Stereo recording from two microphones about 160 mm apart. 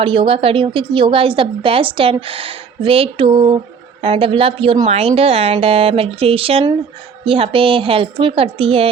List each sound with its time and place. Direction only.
0.0 s a woman's voice: 35° right (ahead or behind)